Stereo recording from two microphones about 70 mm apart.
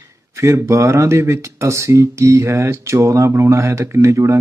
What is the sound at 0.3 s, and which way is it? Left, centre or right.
Speech, right.